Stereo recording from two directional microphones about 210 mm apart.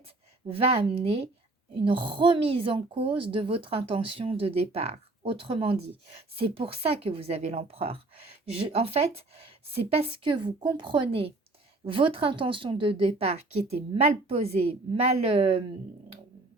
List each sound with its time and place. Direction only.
0.4 s a woman's voice: 25° right (ahead or behind)